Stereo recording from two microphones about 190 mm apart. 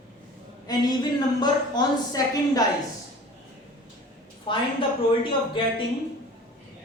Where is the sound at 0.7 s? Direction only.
20° left (ahead or behind).